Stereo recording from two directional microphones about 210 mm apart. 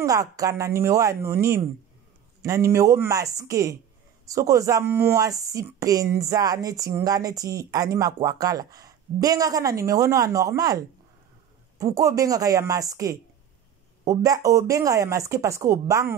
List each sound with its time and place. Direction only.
0.0 s speech: 15° right (ahead or behind)